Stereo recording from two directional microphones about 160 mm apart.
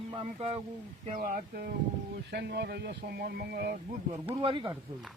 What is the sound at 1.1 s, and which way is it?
Speech, 60° right (ahead or behind).